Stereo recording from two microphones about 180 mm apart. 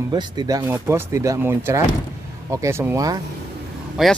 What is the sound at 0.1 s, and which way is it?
Speech, 20° right (ahead or behind).